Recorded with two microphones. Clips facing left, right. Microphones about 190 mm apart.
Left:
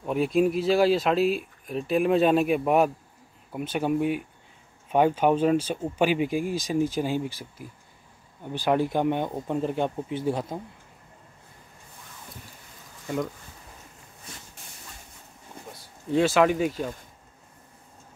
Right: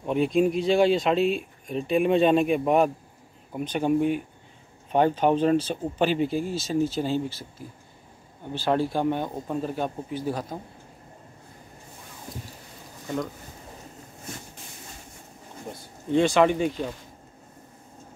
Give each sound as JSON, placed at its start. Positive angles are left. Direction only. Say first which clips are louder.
{"t": 0.0, "sound": "speech", "louder": "right 1 dB", "side_deg": 5}
{"t": 16.1, "sound": "speech", "louder": "right 1 dB", "side_deg": 5}